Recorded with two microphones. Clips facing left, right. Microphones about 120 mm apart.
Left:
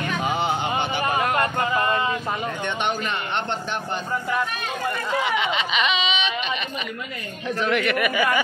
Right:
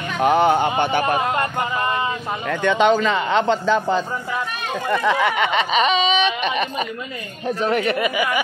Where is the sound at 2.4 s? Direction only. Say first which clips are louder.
Right 8 dB; 90° right.